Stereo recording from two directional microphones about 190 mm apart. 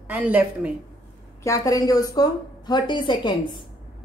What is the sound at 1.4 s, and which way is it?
Speech, 20° left (ahead or behind).